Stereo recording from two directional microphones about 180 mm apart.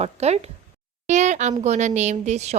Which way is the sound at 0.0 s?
35° right (ahead or behind).